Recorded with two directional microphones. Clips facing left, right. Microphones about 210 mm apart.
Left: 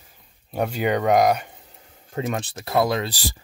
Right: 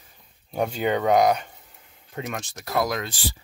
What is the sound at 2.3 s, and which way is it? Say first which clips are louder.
Speech: left 4 dB; 30° left (ahead or behind).